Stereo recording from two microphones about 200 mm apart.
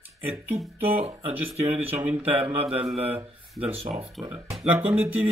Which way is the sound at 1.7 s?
10° right (ahead or behind).